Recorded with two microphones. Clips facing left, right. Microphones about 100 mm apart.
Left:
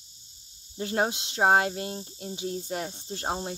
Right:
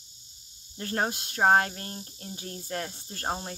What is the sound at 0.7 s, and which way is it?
Speech, 15° left (ahead or behind).